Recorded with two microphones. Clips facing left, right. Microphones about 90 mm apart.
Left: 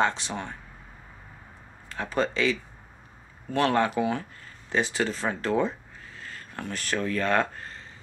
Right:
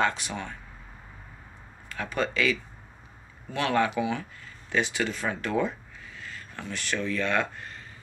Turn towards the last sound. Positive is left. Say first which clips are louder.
# left 2 dB
turn(degrees=40)  # may be behind; listen again after turning